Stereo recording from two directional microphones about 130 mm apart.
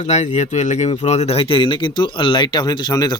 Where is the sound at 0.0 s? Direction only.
60° left (ahead or behind).